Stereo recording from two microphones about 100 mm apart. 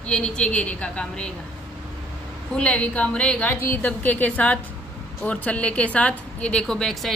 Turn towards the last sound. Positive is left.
turn(degrees=5)  # may be behind; listen again after turning